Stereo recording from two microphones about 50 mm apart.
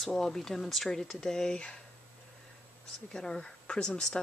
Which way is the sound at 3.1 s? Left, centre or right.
Centre.